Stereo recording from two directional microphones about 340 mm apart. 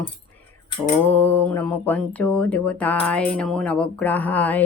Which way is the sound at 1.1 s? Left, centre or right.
Centre.